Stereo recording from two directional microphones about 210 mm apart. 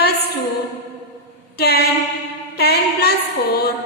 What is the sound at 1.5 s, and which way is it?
A woman's voice, 50° left (ahead or behind).